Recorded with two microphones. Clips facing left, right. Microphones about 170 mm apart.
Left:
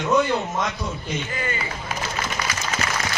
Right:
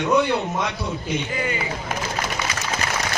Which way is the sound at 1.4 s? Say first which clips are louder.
Right 3 dB; 15° right (ahead or behind).